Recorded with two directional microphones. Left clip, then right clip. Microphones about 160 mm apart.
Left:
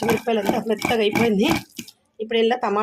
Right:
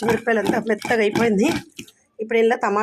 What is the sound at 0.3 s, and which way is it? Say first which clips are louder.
Speech: right 2 dB; 20° right (ahead or behind).